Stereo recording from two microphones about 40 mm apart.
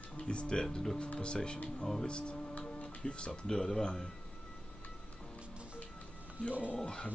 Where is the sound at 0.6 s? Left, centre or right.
Centre.